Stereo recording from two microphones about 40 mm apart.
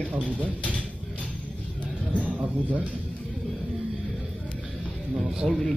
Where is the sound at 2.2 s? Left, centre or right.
Right.